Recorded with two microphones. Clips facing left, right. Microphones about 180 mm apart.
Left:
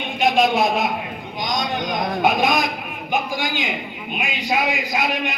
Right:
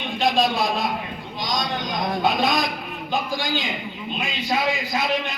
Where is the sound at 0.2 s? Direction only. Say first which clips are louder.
Left 3 dB; 20° left (ahead or behind).